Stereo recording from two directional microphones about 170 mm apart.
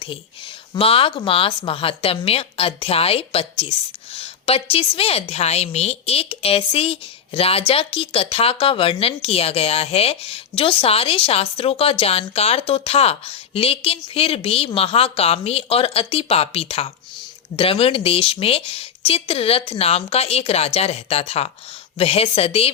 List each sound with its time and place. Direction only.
0.7 s a woman's voice: 35° left (ahead or behind)